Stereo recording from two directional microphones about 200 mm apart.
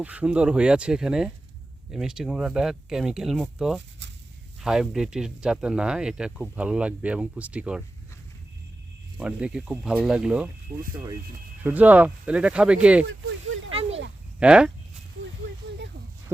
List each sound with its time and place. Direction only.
0.0 s speech: 5° right (ahead or behind)
9.1 s speech: 5° right (ahead or behind)
11.6 s speech: 10° right (ahead or behind)
13.1 s a sound: 85° right
14.3 s speech: 5° right (ahead or behind)